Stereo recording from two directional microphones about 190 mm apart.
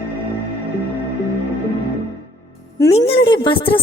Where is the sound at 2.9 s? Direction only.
30° left (ahead or behind).